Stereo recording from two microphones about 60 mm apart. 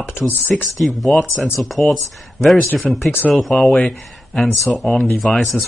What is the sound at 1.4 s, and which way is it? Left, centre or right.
Speech, centre.